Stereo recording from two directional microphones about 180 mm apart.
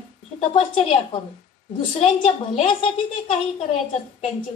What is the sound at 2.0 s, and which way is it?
A woman's voice, 35° left (ahead or behind).